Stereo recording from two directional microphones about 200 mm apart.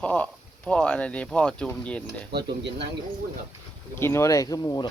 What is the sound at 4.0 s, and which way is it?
Speech, 15° left (ahead or behind).